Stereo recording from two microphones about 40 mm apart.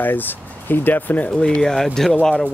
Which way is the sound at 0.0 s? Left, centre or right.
Left.